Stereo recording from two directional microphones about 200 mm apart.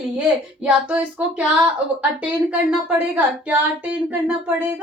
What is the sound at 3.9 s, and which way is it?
Speech, 10° right (ahead or behind).